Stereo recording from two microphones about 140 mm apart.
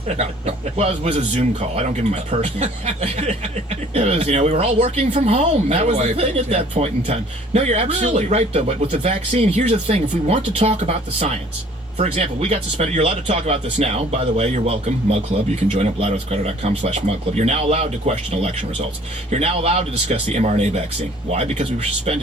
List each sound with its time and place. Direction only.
0.2 s speech: 50° right (ahead or behind)